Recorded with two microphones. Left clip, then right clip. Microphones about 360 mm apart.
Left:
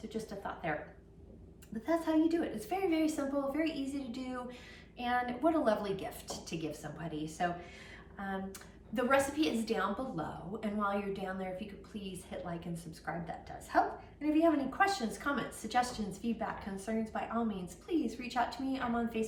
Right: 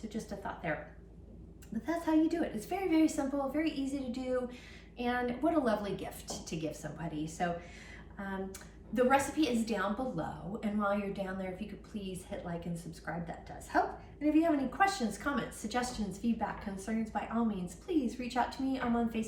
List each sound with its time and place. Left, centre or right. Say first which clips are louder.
0.1 s a woman's voice: left 1 dB; centre
1.9 s a woman's voice: even; centre
8.9 s a woman's voice: right 2 dB; centre